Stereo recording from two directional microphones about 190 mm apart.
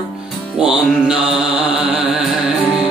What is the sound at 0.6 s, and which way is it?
Mantra, 5° right (ahead or behind).